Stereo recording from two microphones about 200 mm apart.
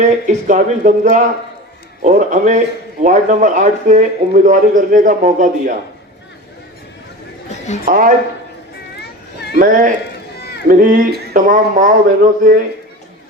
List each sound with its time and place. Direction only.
0.0 s a man's voice: 40° right (ahead or behind)
7.9 s speech: 45° right (ahead or behind)
9.0 s children playing: 55° left (ahead or behind)
9.6 s a man's voice: 40° right (ahead or behind)
10.3 s run: 55° left (ahead or behind)
10.7 s speech: 45° right (ahead or behind)